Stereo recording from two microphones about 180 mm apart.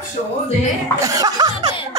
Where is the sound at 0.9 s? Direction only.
20° right (ahead or behind).